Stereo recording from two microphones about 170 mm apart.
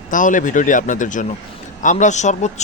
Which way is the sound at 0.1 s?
50° left (ahead or behind).